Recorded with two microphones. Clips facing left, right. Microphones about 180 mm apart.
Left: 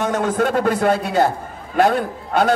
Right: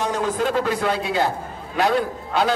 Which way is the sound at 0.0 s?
50° left (ahead or behind).